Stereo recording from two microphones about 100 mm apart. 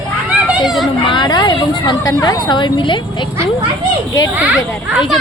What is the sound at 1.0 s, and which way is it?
Speech, 50° left (ahead or behind).